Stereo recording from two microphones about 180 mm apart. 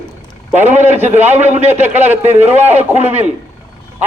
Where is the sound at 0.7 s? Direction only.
10° right (ahead or behind).